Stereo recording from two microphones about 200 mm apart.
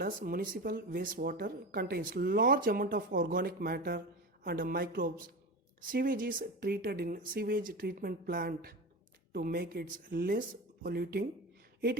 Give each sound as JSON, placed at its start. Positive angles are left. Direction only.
{"t": 0.0, "sound": "speech", "side_deg": -45}